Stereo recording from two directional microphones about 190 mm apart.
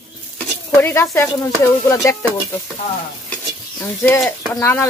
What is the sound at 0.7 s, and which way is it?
A woman's voice, 15° left (ahead or behind).